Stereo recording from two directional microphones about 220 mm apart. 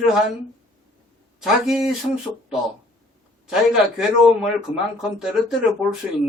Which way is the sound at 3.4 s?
Centre (ahead or behind).